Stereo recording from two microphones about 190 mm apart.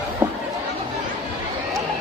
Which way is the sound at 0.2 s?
10° right (ahead or behind).